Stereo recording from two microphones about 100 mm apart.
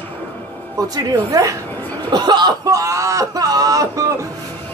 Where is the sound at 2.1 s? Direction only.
45° right (ahead or behind).